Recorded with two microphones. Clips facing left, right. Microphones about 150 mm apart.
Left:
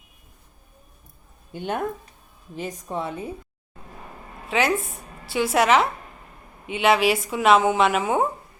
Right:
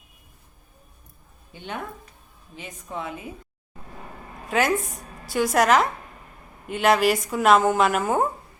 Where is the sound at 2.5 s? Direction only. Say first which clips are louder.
Left 5 dB; 40° left (ahead or behind).